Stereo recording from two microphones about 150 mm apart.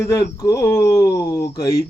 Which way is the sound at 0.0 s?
20° left (ahead or behind).